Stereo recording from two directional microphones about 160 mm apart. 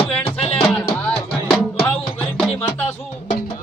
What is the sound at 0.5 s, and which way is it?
Music, 5° left (ahead or behind).